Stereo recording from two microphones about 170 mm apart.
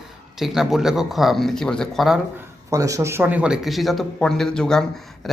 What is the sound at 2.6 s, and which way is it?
Speech, 20° right (ahead or behind).